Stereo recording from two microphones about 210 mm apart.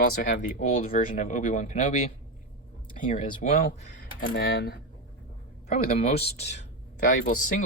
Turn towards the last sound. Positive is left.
turn(degrees=40)  # may be behind; listen again after turning